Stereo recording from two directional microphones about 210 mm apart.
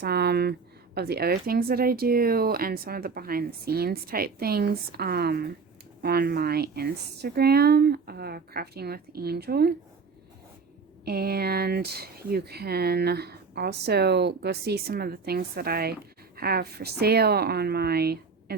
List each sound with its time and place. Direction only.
0.0 s speech: 50° right (ahead or behind)
11.0 s speech: 50° right (ahead or behind)